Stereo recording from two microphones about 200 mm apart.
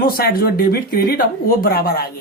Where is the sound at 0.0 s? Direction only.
50° left (ahead or behind).